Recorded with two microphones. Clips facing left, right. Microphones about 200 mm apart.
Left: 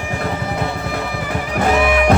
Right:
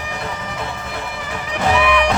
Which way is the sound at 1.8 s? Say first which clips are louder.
Left 1 dB; 40° left (ahead or behind).